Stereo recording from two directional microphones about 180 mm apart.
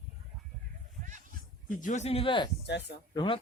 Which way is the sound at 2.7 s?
70° left (ahead or behind).